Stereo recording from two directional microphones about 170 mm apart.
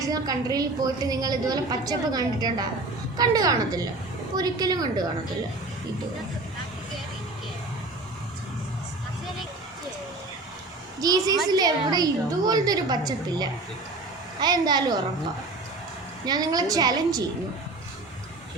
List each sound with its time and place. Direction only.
0.0 s a woman's voice: 20° right (ahead or behind)
11.0 s a woman's voice: 20° right (ahead or behind)
16.2 s a woman's voice: 25° right (ahead or behind)